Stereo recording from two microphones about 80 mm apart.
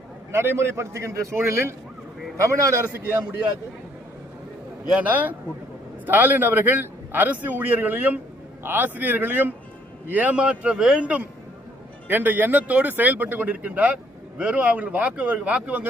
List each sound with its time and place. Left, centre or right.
0.3 s a man's voice: right
2.9 s speech: right
4.9 s a man's voice: centre